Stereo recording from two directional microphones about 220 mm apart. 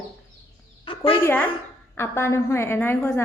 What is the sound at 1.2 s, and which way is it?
A woman's voice, 10° left (ahead or behind).